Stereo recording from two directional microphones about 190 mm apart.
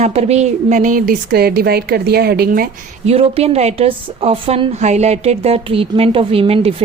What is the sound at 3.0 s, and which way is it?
A woman's voice, 30° right (ahead or behind).